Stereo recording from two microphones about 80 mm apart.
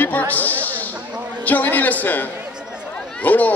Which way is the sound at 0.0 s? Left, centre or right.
Left.